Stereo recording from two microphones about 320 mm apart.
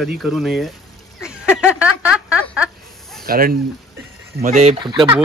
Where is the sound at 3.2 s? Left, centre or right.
Right; by 5.2 s centre.